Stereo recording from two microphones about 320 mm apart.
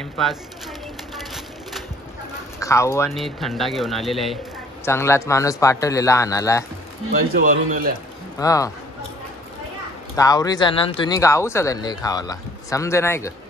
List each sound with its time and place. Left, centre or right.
0.0 s a sound: centre
2.6 s speech: centre
7.1 s speech: right
8.4 s speech: centre
10.1 s speech: centre